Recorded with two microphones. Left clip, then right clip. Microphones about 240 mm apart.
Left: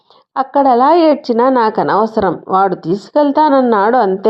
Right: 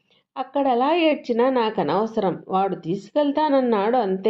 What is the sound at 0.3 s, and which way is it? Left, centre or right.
Speech, left.